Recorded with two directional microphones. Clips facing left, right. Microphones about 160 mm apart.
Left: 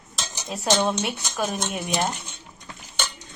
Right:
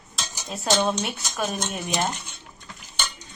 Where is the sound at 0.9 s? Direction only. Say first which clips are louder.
Left 1 dB; 15° left (ahead or behind).